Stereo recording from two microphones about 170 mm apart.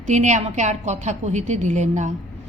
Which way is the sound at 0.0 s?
45° right (ahead or behind).